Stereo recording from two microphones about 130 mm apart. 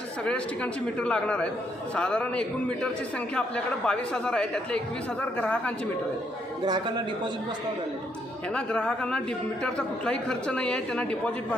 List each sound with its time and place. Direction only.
0.3 s a man's voice: 10° left (ahead or behind)
6.7 s a man's voice: 35° right (ahead or behind)
8.5 s a man's voice: 10° left (ahead or behind)